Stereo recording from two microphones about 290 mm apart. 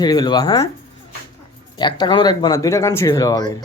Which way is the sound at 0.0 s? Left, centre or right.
Centre.